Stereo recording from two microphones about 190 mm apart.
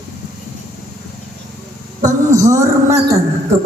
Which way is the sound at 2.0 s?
15° right (ahead or behind).